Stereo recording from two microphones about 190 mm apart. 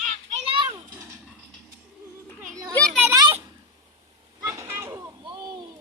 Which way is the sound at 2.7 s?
5° left (ahead or behind).